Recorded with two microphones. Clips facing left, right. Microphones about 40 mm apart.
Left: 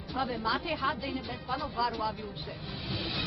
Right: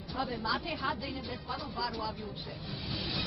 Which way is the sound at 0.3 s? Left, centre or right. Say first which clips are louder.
Left 3 dB; centre.